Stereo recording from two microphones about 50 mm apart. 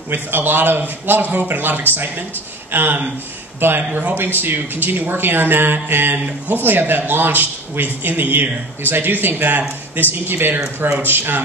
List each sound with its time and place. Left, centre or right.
0.1 s a man's voice: right